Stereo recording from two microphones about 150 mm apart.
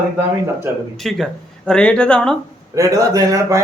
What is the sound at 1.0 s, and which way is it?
Speech, 5° left (ahead or behind).